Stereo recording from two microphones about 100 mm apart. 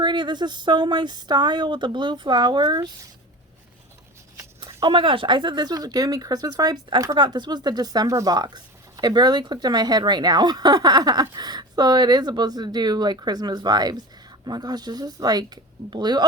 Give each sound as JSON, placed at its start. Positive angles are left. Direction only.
{"t": 0.0, "sound": "speech", "side_deg": -50}
{"t": 4.8, "sound": "speech", "side_deg": -60}